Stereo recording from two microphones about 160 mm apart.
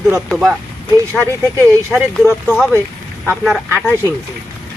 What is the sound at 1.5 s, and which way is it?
Speech, 15° right (ahead or behind).